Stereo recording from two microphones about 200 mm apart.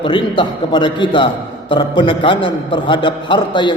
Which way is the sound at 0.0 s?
25° left (ahead or behind).